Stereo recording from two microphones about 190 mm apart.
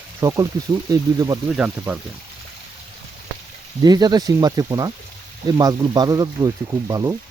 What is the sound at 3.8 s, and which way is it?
Speech, 20° right (ahead or behind).